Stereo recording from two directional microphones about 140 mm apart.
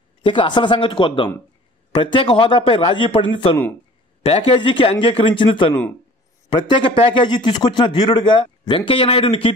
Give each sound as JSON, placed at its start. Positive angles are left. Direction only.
{"t": 0.2, "sound": "a man's voice", "side_deg": 35}